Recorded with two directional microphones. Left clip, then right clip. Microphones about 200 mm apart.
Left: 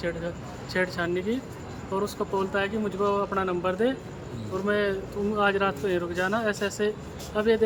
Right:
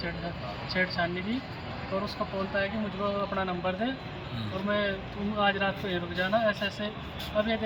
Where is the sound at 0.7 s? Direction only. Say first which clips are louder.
Left 2 dB; 15° left (ahead or behind).